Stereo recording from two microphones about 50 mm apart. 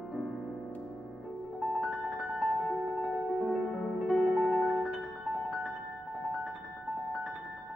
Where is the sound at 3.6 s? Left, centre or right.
Centre.